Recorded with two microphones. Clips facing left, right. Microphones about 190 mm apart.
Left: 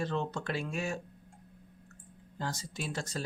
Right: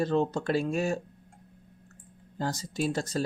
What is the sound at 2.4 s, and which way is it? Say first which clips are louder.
Speech: right 8 dB; 35° right (ahead or behind).